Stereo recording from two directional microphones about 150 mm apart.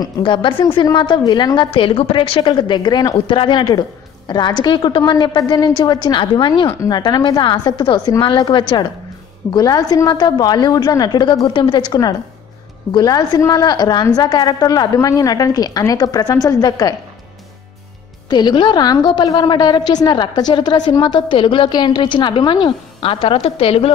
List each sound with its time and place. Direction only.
0.0 s a woman's voice: 35° left (ahead or behind)
18.3 s a woman's voice: 30° left (ahead or behind)